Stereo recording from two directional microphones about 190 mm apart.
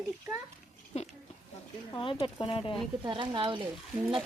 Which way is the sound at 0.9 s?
35° left (ahead or behind).